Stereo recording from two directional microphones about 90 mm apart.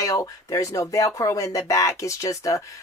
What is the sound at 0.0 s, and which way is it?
Speech, 35° left (ahead or behind).